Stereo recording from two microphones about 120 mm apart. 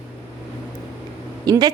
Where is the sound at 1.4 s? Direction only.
30° right (ahead or behind).